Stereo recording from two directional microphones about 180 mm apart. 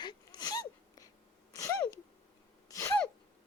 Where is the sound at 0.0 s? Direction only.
25° left (ahead or behind).